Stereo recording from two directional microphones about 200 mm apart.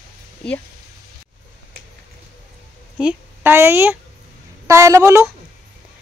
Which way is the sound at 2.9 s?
5° right (ahead or behind).